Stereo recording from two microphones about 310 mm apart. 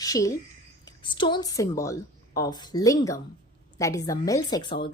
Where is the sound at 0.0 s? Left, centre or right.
Centre.